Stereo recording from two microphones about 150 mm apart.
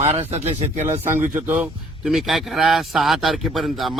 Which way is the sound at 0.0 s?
45° right (ahead or behind).